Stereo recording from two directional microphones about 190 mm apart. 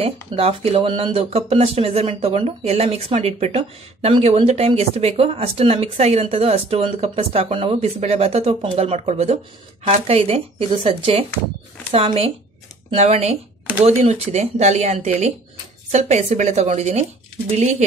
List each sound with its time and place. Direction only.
0.0 s speech: 30° right (ahead or behind)